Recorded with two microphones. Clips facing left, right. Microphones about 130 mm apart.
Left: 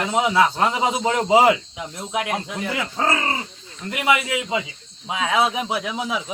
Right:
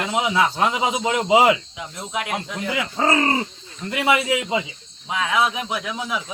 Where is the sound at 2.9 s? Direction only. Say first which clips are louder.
Right 2 dB; 5° right (ahead or behind).